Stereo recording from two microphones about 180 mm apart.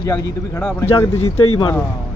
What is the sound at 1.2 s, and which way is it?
Speech, 25° left (ahead or behind).